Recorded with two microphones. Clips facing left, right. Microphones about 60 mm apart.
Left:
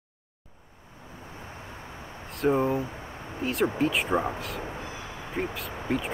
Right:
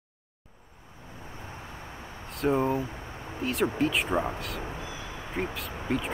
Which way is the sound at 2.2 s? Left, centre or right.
Centre.